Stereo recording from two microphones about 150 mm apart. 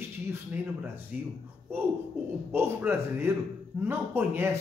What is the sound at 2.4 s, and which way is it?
Speech, 15° right (ahead or behind).